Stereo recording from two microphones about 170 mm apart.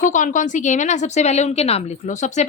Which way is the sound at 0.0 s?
50° left (ahead or behind).